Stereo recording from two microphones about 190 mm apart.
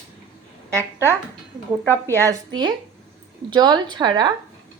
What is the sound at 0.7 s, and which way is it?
Speech, 15° right (ahead or behind).